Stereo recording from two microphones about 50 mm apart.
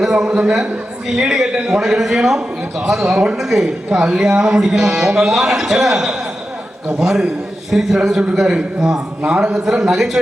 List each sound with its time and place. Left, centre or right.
0.0 s a man's voice: centre
3.8 s a man's voice: centre
9.6 s a man's voice: centre